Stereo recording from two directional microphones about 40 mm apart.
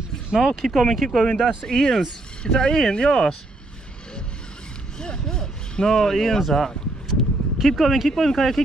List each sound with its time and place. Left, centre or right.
0.4 s speech: centre
5.0 s speech: centre
7.1 s speech: centre